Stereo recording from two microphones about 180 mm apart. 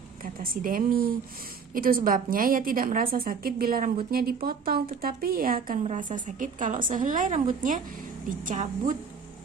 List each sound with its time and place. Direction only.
0.2 s a woman's voice: 50° right (ahead or behind)